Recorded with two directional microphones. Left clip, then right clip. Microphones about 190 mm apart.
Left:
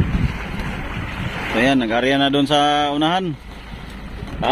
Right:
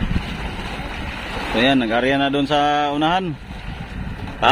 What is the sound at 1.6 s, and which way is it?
Speech, 5° left (ahead or behind).